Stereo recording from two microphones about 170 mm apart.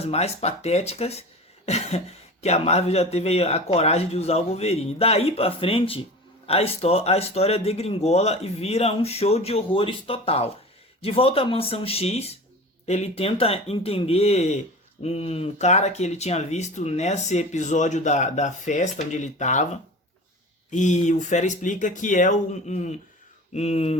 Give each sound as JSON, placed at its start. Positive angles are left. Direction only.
{"t": 0.0, "sound": "speech", "side_deg": 40}